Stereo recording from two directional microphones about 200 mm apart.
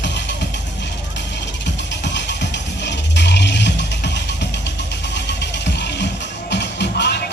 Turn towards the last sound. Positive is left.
turn(degrees=60)  # may be behind; listen again after turning